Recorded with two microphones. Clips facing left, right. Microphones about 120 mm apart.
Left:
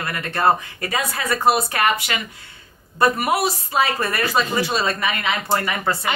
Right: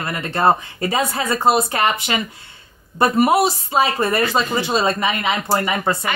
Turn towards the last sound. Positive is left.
turn(degrees=-20)  # may be behind; listen again after turning